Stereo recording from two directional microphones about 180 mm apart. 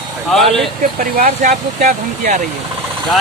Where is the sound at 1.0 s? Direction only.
50° right (ahead or behind).